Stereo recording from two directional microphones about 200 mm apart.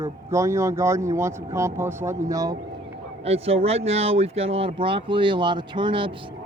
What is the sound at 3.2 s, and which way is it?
Speech, 30° right (ahead or behind).